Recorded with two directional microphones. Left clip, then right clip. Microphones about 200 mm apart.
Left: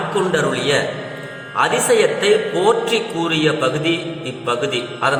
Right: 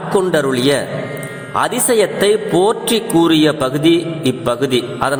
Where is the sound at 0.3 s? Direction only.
50° right (ahead or behind).